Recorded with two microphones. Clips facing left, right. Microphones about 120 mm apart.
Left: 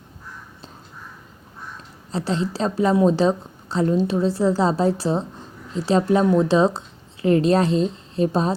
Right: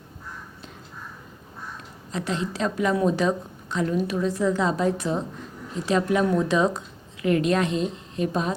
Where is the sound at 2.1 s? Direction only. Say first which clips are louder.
Left 4 dB; 30° left (ahead or behind).